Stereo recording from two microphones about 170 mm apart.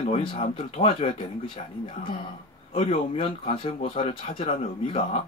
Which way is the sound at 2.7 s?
35° left (ahead or behind).